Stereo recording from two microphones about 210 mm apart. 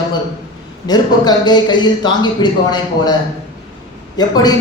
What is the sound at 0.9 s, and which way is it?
Speech, 20° left (ahead or behind).